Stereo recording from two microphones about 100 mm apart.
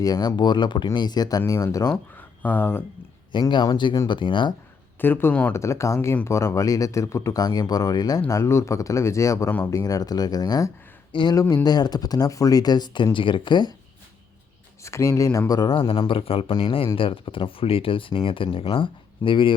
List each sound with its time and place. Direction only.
0.0 s speech: 40° left (ahead or behind)
1.9 s speech: 15° left (ahead or behind)
3.5 s speech: 50° left (ahead or behind)
4.9 s speech: 20° left (ahead or behind)
5.5 s speech: 30° left (ahead or behind)
8.3 s speech: 30° left (ahead or behind)
9.5 s speech: 20° left (ahead or behind)
9.7 s speech: 35° left (ahead or behind)
11.1 s speech: 50° left (ahead or behind)
11.3 s speech: 40° left (ahead or behind)
14.8 s speech: 30° left (ahead or behind)
15.7 s speech: 55° left (ahead or behind); by 16.5 s 70° left (ahead or behind)
16.5 s speech: 45° left (ahead or behind)
16.7 s speech: 60° left (ahead or behind)